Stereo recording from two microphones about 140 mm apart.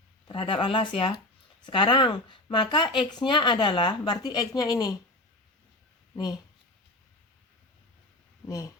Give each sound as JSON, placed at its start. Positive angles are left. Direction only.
{"t": 0.3, "sound": "speech", "side_deg": 35}
{"t": 8.4, "sound": "speech", "side_deg": 25}